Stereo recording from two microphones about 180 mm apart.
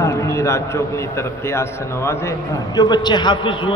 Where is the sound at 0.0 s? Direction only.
15° left (ahead or behind).